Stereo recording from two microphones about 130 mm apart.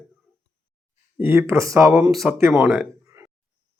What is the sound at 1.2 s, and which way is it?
Speech, 20° right (ahead or behind).